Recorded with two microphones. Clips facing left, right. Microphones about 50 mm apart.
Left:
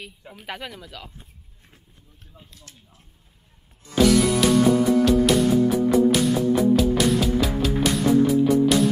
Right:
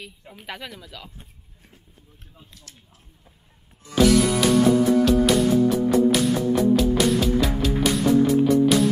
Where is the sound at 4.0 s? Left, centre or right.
Centre.